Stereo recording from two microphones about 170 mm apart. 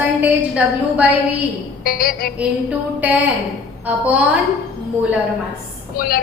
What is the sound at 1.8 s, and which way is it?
Speech, 60° left (ahead or behind).